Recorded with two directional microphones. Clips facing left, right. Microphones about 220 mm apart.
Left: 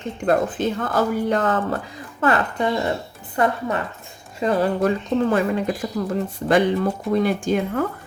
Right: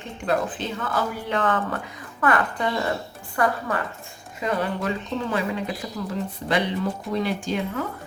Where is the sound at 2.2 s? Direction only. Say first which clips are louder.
Left 3 dB; 25° left (ahead or behind).